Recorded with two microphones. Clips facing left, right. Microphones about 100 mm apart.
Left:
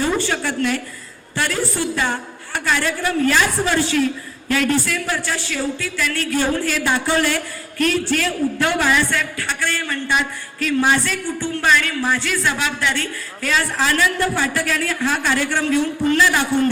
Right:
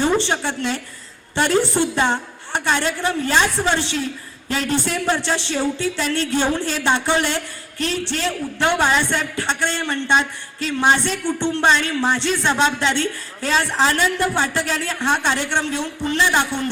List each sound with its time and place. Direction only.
0.0 s a man's voice: 25° right (ahead or behind)